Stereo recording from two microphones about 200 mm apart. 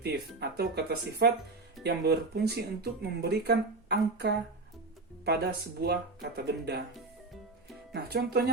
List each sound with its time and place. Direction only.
0.0 s speech: 55° right (ahead or behind)
5.8 s speech: 55° right (ahead or behind)
7.9 s speech: 55° right (ahead or behind)